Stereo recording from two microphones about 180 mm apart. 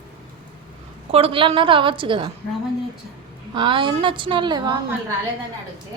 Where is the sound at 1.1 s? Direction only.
30° right (ahead or behind).